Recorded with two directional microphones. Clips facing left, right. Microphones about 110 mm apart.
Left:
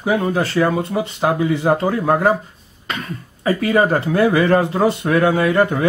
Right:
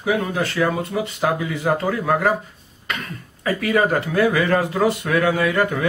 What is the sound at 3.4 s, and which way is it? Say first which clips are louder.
Speech: left 3 dB; 30° left (ahead or behind).